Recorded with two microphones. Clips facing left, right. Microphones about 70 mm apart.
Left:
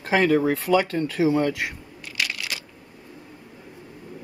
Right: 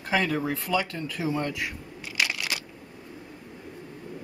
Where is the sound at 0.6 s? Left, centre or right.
Left.